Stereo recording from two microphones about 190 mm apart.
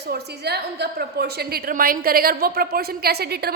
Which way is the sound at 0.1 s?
60° right (ahead or behind).